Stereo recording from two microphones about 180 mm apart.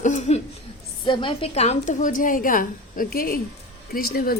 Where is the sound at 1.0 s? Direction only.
25° left (ahead or behind).